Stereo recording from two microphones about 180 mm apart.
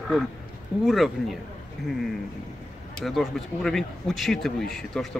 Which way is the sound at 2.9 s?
Centre (ahead or behind).